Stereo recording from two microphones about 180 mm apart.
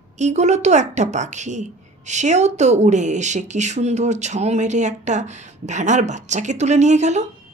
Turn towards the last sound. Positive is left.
turn(degrees=-40)  # may be behind; listen again after turning